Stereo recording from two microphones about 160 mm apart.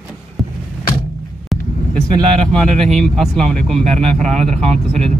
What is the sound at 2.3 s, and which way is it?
Speech, 5° left (ahead or behind).